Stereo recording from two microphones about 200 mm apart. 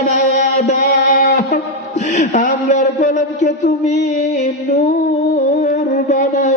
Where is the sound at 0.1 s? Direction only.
35° left (ahead or behind).